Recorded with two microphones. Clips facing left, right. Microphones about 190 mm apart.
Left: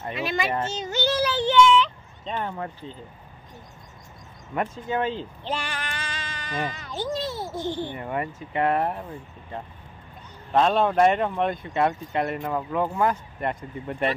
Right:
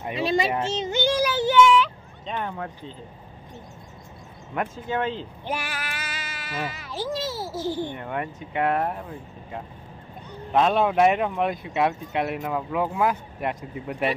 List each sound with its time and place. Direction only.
0.2 s speech: 30° right (ahead or behind)
0.7 s a sound: 15° right (ahead or behind); by 2.7 s centre (ahead or behind)
4.6 s speech: centre (ahead or behind)
10.5 s speech: 5° right (ahead or behind)